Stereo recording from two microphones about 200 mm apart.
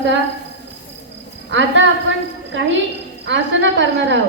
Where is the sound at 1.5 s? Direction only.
65° right (ahead or behind).